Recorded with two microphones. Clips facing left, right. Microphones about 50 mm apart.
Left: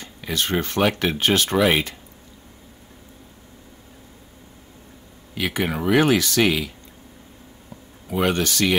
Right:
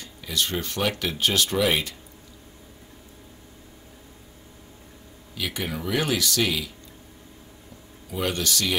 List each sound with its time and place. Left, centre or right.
0.0 s speech: left
5.3 s speech: left
8.1 s speech: left